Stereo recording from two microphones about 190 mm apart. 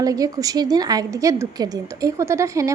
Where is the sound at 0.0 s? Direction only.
20° right (ahead or behind).